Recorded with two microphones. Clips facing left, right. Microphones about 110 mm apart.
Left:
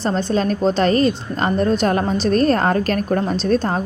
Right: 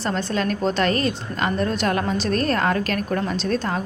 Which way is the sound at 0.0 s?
30° left (ahead or behind).